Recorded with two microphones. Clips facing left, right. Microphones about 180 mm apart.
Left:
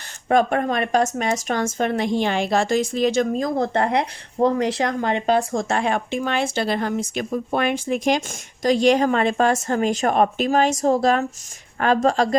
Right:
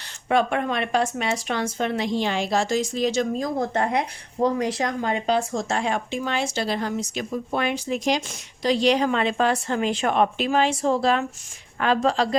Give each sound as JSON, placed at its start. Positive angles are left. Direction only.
{"t": 0.3, "sound": "speech", "side_deg": 45}